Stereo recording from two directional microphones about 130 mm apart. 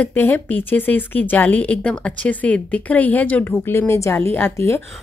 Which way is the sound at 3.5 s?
20° left (ahead or behind).